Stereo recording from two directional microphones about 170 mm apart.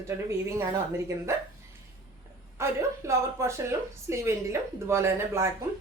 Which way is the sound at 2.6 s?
15° right (ahead or behind).